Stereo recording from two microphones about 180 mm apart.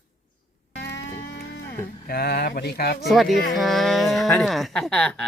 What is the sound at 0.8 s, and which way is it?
Livestock, 70° left (ahead or behind).